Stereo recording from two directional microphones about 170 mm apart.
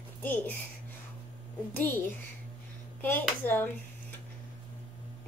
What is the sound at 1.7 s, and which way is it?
Speech, 10° left (ahead or behind).